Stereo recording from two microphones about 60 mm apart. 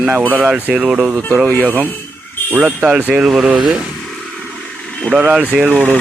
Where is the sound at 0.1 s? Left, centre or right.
Right.